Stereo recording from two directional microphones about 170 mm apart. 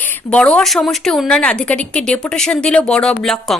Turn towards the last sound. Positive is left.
turn(degrees=5)  # may be behind; listen again after turning